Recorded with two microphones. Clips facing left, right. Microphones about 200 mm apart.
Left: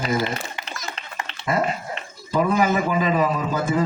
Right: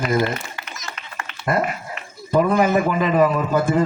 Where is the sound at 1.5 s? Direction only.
55° right (ahead or behind).